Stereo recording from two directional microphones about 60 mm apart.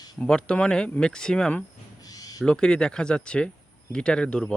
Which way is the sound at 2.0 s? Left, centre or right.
Left.